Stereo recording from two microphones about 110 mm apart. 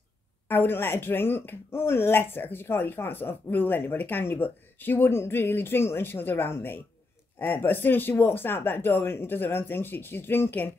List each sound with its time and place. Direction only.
0.5 s speech: 20° left (ahead or behind)